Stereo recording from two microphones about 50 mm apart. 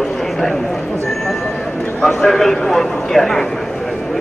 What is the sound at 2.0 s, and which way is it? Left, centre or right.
A man's voice, centre.